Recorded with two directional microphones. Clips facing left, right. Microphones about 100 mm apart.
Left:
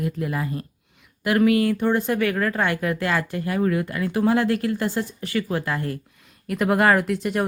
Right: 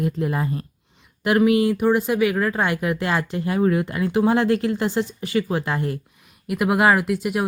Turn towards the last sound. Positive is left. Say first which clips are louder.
# even
turn(degrees=-10)  # may be behind; listen again after turning